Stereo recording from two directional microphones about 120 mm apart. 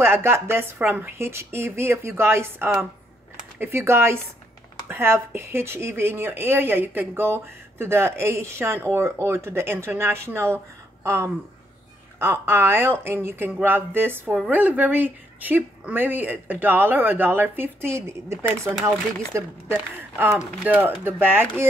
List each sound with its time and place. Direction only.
0.0 s speech: 20° right (ahead or behind)
12.2 s speech: 20° right (ahead or behind)
20.0 s speech: 15° right (ahead or behind)